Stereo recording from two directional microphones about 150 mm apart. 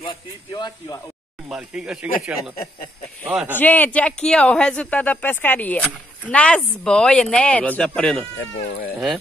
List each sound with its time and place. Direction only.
0.0 s speech: 35° left (ahead or behind)
1.5 s speech: 5° right (ahead or behind)
3.3 s speech: 5° right (ahead or behind)
3.5 s speech: 10° left (ahead or behind)
8.6 s speech: 90° left